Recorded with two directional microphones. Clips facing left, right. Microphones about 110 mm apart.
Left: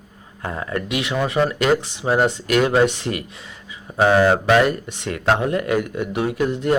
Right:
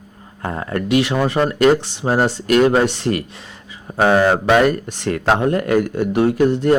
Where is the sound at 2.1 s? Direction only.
35° right (ahead or behind).